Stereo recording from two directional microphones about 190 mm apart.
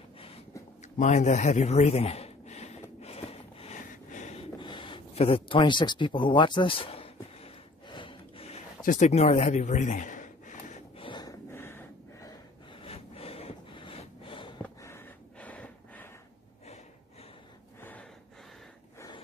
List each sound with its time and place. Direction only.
0.9 s a sound: 40° left (ahead or behind)
8.8 s speech: 35° left (ahead or behind)
11.0 s gasp: 25° left (ahead or behind)
12.8 s snort: 30° left (ahead or behind)
14.6 s gasp: 15° left (ahead or behind)
17.7 s gasp: 10° left (ahead or behind)
18.9 s snort: 20° left (ahead or behind)